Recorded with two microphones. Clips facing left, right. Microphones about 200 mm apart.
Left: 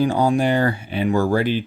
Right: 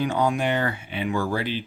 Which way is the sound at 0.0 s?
35° left (ahead or behind).